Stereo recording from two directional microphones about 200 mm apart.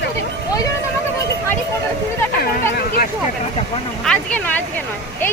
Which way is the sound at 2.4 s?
50° left (ahead or behind).